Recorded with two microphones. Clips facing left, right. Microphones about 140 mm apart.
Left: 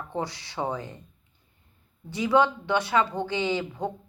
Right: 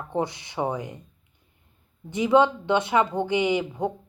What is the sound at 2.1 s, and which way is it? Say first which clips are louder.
Speech: right 3 dB; 20° right (ahead or behind).